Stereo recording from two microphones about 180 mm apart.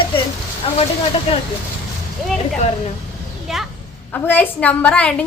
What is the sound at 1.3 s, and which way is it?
Speech, 35° left (ahead or behind).